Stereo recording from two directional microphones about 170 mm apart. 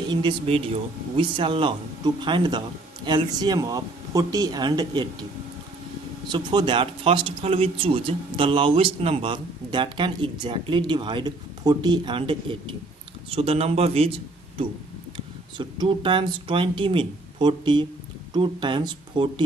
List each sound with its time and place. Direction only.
0.1 s speech: 30° right (ahead or behind)
6.2 s a man's voice: 25° right (ahead or behind)